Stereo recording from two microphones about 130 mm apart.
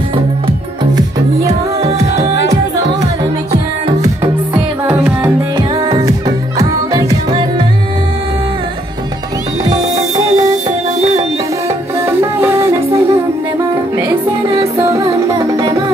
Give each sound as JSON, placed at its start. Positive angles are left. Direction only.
{"t": 0.5, "sound": "music", "side_deg": -30}
{"t": 1.8, "sound": "music", "side_deg": -55}
{"t": 4.9, "sound": "music", "side_deg": -15}
{"t": 9.7, "sound": "music", "side_deg": -30}
{"t": 12.2, "sound": "music", "side_deg": -20}
{"t": 14.9, "sound": "music", "side_deg": -25}